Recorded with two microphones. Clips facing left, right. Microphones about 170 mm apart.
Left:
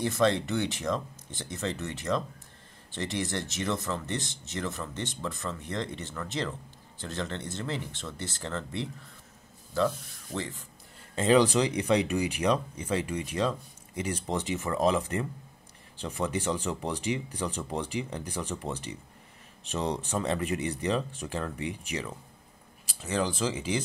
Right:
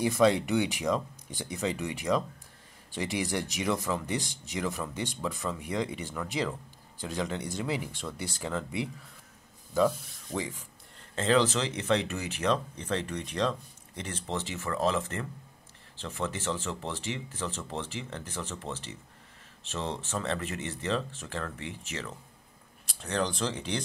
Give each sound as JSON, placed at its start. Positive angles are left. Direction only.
{"t": 0.0, "sound": "speech", "side_deg": -10}
{"t": 11.1, "sound": "speech", "side_deg": 15}
{"t": 22.8, "sound": "speech", "side_deg": 5}